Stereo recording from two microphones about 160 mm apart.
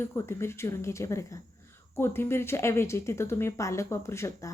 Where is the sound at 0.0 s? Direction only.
15° left (ahead or behind).